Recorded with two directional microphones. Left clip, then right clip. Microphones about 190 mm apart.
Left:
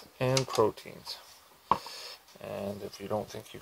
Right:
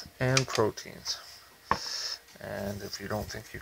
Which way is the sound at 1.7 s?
30° right (ahead or behind).